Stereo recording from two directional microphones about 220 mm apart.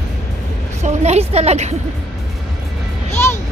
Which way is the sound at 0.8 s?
30° right (ahead or behind).